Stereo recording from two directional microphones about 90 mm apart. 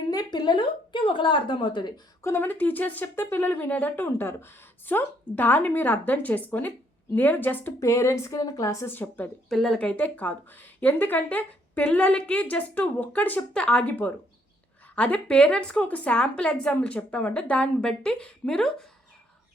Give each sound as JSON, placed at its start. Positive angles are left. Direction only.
{"t": 0.1, "sound": "a woman's voice", "side_deg": 50}
{"t": 2.2, "sound": "speech", "side_deg": 25}
{"t": 7.8, "sound": "speech", "side_deg": 35}
{"t": 8.9, "sound": "speech", "side_deg": 20}
{"t": 9.5, "sound": "speech", "side_deg": 5}
{"t": 14.9, "sound": "speech", "side_deg": 15}